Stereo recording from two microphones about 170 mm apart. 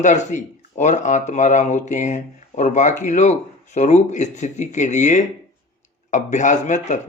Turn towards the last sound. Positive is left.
turn(degrees=45)  # may be behind; listen again after turning